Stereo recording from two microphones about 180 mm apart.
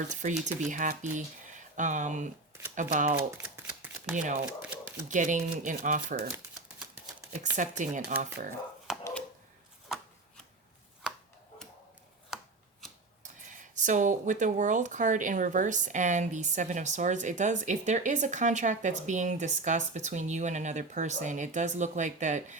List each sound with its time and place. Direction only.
0.1 s speech: 40° right (ahead or behind)
3.3 s shuffling cards: 10° right (ahead or behind)
4.1 s speech: 45° right (ahead or behind)
4.4 s typewriter: 5° right (ahead or behind)
5.0 s speech: 45° right (ahead or behind)
6.3 s typewriter: 5° right (ahead or behind)
7.5 s speech: 45° right (ahead or behind)
8.9 s dog: 5° right (ahead or behind)
9.9 s chopping: centre (ahead or behind)
12.3 s a sound: centre (ahead or behind)
13.6 s speech: 45° right (ahead or behind)